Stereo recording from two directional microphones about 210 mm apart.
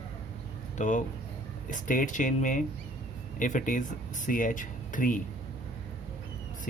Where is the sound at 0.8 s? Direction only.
35° left (ahead or behind).